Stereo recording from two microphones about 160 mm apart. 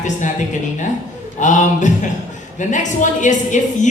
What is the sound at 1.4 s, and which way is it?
A woman's voice, 50° left (ahead or behind).